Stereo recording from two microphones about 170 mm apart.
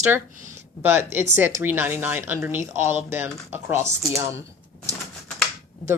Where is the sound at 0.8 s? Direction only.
15° right (ahead or behind).